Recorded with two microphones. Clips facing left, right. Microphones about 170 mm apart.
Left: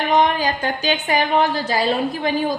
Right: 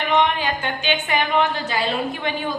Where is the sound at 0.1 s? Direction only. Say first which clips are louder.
Left 2 dB; 35° left (ahead or behind).